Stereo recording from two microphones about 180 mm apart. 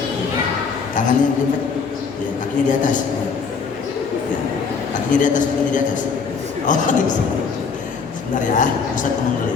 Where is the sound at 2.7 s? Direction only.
45° left (ahead or behind).